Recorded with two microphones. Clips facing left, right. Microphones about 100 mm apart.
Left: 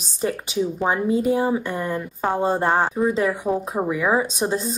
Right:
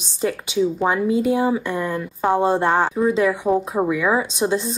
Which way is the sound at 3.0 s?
40° left (ahead or behind).